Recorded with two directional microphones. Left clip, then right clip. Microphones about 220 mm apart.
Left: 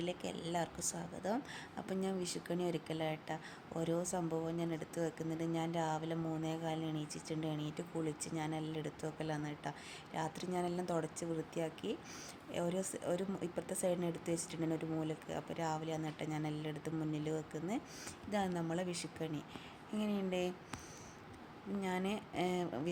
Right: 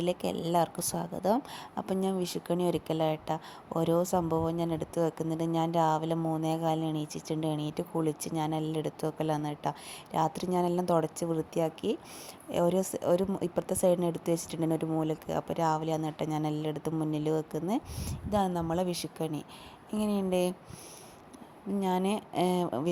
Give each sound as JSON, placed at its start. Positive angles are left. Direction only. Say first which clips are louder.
{"t": 0.0, "sound": "speech", "louder": "right 10 dB", "side_deg": -30}
{"t": 21.8, "sound": "speech", "louder": "right 10 dB", "side_deg": -30}